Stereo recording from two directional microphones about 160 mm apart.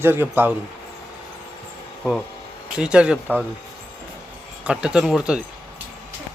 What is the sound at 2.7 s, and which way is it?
Speech, 5° right (ahead or behind).